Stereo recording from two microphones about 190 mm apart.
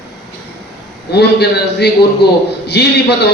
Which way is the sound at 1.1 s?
60° left (ahead or behind).